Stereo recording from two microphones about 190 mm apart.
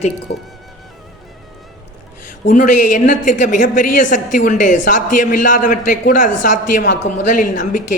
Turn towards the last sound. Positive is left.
turn(degrees=45)  # may be behind; listen again after turning